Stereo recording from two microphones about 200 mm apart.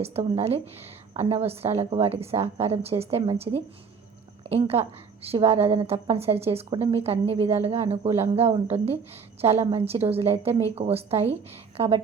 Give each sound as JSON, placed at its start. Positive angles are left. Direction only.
{"t": 0.0, "sound": "a woman's voice", "side_deg": -30}